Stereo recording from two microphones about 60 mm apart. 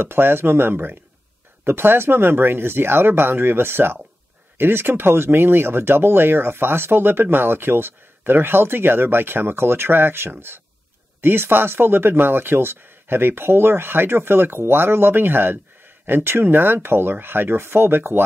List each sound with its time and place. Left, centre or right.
0.0 s speech: right